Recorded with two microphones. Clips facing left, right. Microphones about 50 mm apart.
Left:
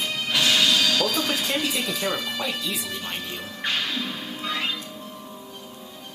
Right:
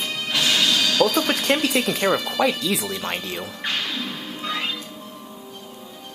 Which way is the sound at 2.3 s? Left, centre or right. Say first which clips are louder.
Right 7 dB; right.